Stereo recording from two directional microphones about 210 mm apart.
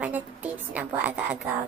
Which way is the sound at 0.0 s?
10° right (ahead or behind).